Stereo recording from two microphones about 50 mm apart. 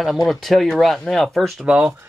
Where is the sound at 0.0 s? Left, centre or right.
Centre.